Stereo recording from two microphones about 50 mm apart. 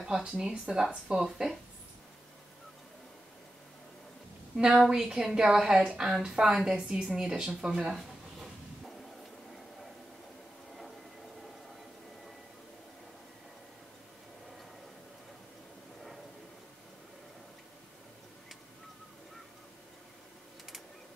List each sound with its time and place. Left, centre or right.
0.0 s a woman's voice: centre
4.6 s a woman's voice: centre